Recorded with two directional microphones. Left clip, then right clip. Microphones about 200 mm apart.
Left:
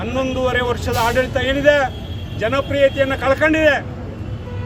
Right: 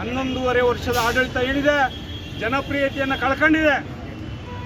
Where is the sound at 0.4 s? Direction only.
Centre (ahead or behind).